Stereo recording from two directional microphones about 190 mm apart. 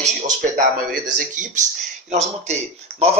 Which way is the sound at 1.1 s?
40° right (ahead or behind).